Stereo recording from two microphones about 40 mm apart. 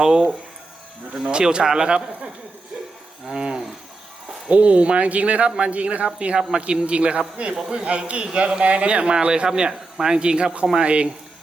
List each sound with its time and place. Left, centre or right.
0.0 s a man's voice: centre; by 6.1 s right
6.1 s a man's voice: right